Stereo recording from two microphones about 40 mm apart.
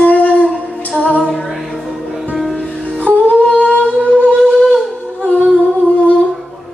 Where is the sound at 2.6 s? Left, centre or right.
Left.